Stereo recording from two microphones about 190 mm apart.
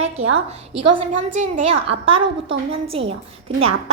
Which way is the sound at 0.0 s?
90° right.